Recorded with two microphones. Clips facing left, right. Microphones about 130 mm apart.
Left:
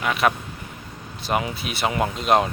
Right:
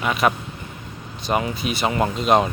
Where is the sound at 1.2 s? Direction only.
5° left (ahead or behind).